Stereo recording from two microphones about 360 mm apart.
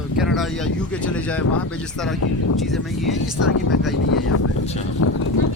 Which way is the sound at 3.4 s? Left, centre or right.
Left.